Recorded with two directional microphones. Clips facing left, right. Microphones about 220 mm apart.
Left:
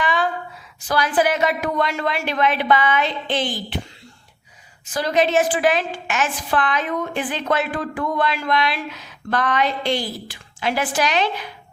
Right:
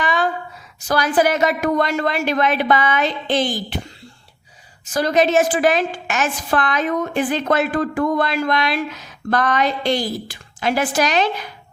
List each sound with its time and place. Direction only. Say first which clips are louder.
0.0 s a sound: right 1 dB; 40° right (ahead or behind)
0.9 s a woman's voice: right 2 dB; 40° right (ahead or behind)
4.9 s a woman's voice: right 2 dB; 45° right (ahead or behind)